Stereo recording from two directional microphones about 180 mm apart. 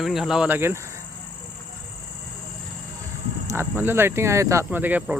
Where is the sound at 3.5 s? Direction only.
15° right (ahead or behind).